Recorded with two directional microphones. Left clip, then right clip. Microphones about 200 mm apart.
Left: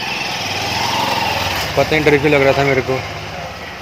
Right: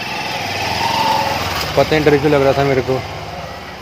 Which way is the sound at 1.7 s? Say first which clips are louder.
Right 1 dB; 15° right (ahead or behind).